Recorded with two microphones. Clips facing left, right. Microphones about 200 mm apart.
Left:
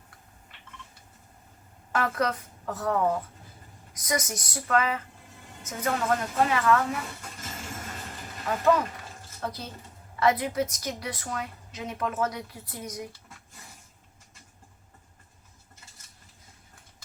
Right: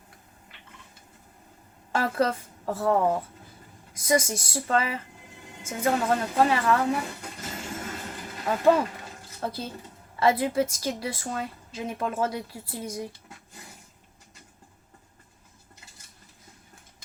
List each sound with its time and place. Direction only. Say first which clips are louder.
1.9 s a woman's voice: right 2 dB; 30° right (ahead or behind)
8.4 s a woman's voice: right 2 dB; 30° right (ahead or behind)